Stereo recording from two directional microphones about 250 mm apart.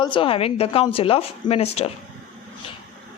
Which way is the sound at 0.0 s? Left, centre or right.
Centre.